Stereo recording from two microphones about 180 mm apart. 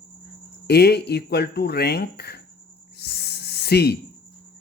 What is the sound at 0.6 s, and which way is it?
Speech, 60° left (ahead or behind).